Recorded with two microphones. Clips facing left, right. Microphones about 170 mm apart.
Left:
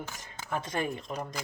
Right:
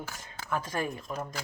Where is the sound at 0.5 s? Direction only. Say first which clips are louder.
Even; 25° left (ahead or behind).